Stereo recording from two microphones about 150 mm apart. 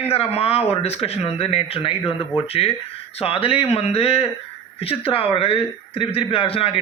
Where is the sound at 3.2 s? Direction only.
40° left (ahead or behind).